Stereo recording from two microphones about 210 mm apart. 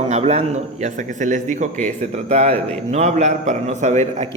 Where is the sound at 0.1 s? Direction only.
30° right (ahead or behind).